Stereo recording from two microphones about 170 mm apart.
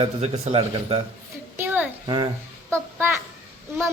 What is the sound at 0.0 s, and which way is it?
Speech, 35° right (ahead or behind).